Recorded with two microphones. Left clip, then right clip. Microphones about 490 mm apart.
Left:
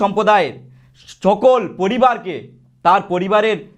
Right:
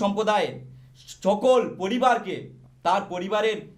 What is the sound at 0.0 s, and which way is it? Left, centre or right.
A man's voice, left.